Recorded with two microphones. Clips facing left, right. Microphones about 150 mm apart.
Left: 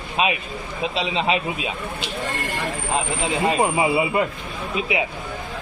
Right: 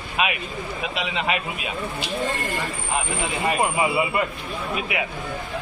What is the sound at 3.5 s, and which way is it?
Speech, 25° left (ahead or behind).